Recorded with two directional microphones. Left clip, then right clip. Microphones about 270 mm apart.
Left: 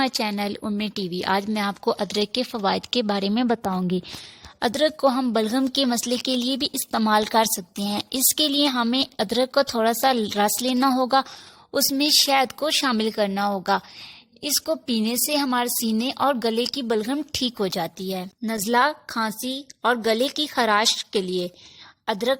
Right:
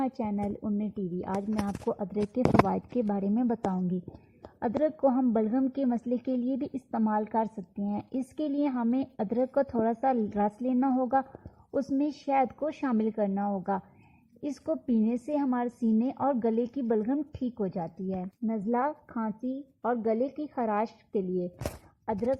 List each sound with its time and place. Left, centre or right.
0.0 s a woman's voice: centre
2.6 s a woman's voice: left